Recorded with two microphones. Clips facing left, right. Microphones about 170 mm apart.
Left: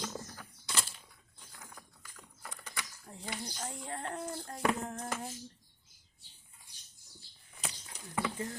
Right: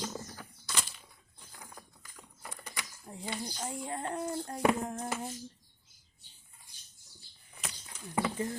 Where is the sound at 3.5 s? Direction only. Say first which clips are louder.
Right 4 dB; 10° right (ahead or behind).